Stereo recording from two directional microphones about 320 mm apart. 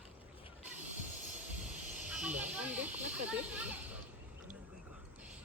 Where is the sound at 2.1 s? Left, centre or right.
Centre.